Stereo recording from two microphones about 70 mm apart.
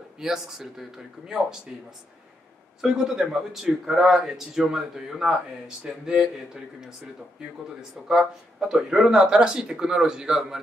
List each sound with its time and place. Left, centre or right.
0.2 s speech: centre
2.8 s a man's voice: centre
8.1 s speech: centre